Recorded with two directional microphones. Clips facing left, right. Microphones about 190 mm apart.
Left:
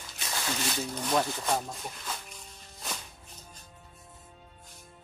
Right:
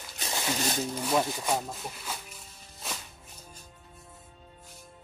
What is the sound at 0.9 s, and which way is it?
Speech, 5° right (ahead or behind).